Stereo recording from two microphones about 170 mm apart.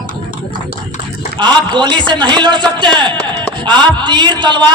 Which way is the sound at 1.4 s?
25° right (ahead or behind).